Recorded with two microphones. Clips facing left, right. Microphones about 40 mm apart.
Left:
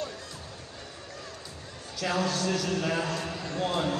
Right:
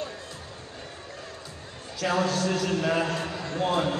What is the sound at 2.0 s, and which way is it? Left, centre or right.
A man's voice, right.